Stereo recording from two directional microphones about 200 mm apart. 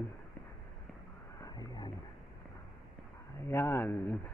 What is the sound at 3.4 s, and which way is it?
Speech, 15° left (ahead or behind).